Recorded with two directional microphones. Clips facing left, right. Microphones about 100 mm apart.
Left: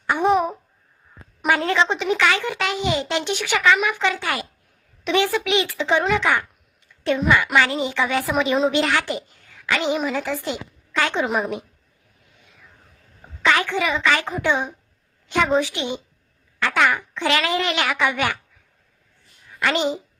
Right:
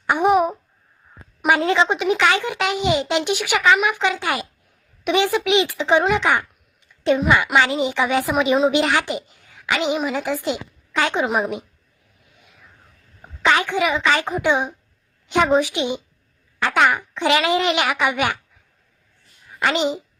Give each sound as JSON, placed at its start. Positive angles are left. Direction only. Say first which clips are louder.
{"t": 0.1, "sound": "babbling", "louder": "right 2 dB", "side_deg": -15}
{"t": 1.5, "sound": "a child's voice", "louder": "right 2 dB", "side_deg": -15}
{"t": 13.4, "sound": "a child's voice", "louder": "right 2 dB", "side_deg": -20}
{"t": 19.5, "sound": "a woman's voice", "louder": "right 1 dB", "side_deg": -20}